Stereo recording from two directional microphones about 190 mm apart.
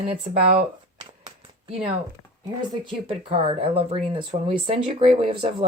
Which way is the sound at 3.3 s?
30° right (ahead or behind).